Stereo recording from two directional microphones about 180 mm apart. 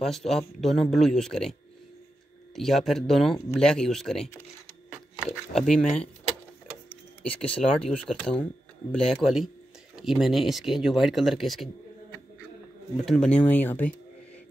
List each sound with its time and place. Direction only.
0.0 s speech: centre (ahead or behind)
5.2 s a sound: centre (ahead or behind)
5.7 s speech: 5° left (ahead or behind)
7.2 s speech: 5° left (ahead or behind)
13.0 s speech: centre (ahead or behind)